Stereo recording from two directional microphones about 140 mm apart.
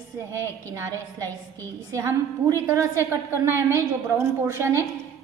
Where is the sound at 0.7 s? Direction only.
20° right (ahead or behind).